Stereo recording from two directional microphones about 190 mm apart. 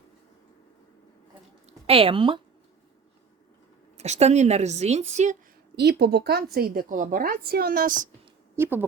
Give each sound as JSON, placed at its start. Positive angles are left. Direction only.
{"t": 1.9, "sound": "a woman's voice", "side_deg": -30}
{"t": 3.9, "sound": "a woman's voice", "side_deg": -35}
{"t": 5.7, "sound": "a woman's voice", "side_deg": -60}
{"t": 8.5, "sound": "speech", "side_deg": -10}